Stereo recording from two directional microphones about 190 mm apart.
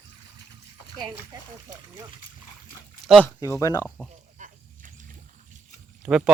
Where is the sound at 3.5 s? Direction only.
20° left (ahead or behind).